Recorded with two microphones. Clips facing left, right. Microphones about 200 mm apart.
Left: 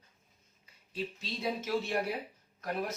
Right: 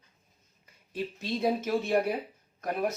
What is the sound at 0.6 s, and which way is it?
A woman's voice, 55° right (ahead or behind).